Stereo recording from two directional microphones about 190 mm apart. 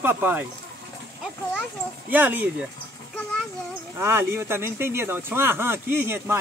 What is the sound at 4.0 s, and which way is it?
Speech, 15° right (ahead or behind).